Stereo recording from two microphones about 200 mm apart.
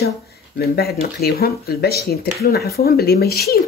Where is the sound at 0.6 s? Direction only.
50° left (ahead or behind).